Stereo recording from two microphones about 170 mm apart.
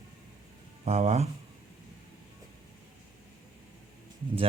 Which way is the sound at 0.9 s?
40° right (ahead or behind).